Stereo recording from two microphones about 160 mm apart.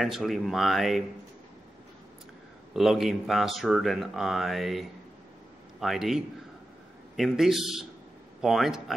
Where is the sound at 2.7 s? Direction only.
Centre (ahead or behind).